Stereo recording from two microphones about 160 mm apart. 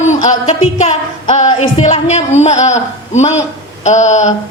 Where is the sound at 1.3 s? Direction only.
35° left (ahead or behind).